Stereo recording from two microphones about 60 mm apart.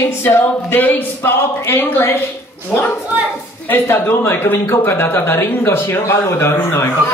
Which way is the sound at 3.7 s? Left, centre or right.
Left.